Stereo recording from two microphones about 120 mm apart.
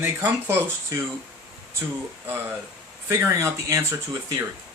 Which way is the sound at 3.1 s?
25° right (ahead or behind).